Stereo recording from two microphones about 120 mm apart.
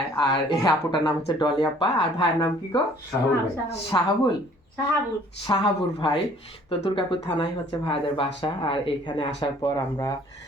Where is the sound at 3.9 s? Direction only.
35° left (ahead or behind).